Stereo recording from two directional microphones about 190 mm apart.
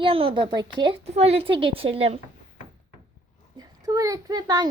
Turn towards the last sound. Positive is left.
turn(degrees=-20)  # may be behind; listen again after turning